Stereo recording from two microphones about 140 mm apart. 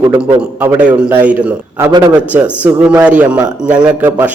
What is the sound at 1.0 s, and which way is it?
Speech, 10° right (ahead or behind).